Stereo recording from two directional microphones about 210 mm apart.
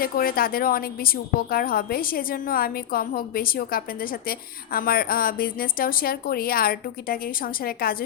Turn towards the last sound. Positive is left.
turn(degrees=45)  # may be behind; listen again after turning